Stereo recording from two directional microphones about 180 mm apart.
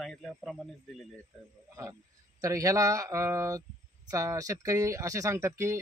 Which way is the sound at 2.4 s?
20° right (ahead or behind).